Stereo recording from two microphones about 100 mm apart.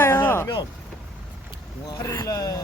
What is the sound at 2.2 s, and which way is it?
Speech, 35° left (ahead or behind).